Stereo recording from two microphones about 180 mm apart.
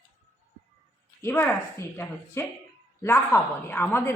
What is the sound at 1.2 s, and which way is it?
A woman's voice, 10° left (ahead or behind).